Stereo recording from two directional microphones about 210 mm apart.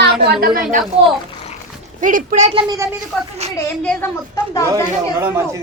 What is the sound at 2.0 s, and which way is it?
Speech, 40° right (ahead or behind).